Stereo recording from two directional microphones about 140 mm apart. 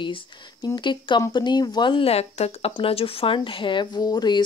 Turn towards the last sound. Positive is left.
turn(degrees=30)  # may be behind; listen again after turning